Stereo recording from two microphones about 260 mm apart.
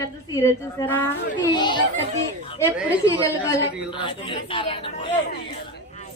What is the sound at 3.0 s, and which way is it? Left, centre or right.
Speech, centre.